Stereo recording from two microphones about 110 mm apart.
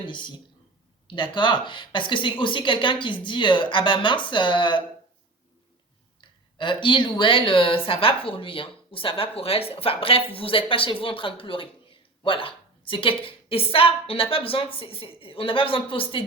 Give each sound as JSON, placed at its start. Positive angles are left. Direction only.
{"t": 0.0, "sound": "a woman's voice", "side_deg": 45}
{"t": 6.6, "sound": "speech", "side_deg": 50}